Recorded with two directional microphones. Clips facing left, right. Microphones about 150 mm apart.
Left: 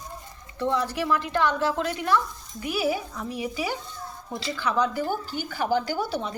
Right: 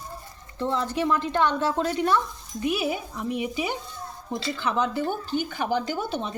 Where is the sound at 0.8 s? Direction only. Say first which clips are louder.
Right 1 dB; 25° right (ahead or behind).